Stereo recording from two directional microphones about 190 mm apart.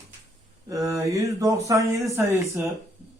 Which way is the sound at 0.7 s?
15° right (ahead or behind).